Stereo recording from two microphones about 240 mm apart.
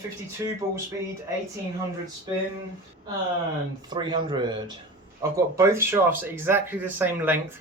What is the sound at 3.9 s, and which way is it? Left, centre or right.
Speech, centre.